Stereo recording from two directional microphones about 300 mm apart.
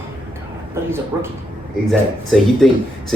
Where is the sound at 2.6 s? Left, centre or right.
Centre.